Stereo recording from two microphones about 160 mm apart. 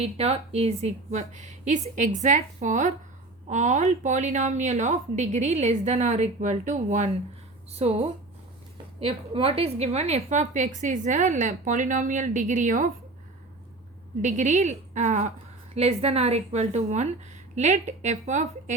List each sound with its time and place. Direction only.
0.0 s a woman's voice: 40° right (ahead or behind)
14.2 s a woman's voice: 50° right (ahead or behind)